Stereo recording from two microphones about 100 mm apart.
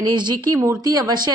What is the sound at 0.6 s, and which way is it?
Speech, 35° right (ahead or behind).